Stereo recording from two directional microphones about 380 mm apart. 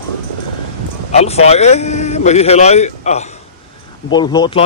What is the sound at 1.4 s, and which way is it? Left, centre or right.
A man's voice, centre.